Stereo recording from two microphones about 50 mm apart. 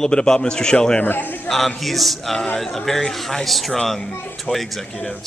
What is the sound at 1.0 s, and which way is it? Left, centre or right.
Speech, left.